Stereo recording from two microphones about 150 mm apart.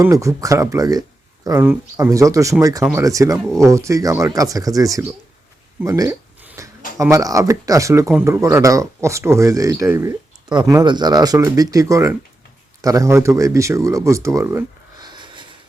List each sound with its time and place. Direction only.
0.0 s speech: 20° right (ahead or behind)